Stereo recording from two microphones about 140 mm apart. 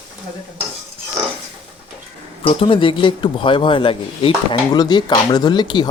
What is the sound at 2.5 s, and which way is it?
A man's voice, 40° left (ahead or behind).